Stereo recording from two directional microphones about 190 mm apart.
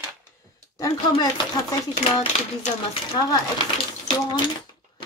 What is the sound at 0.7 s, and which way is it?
Speech, 20° left (ahead or behind).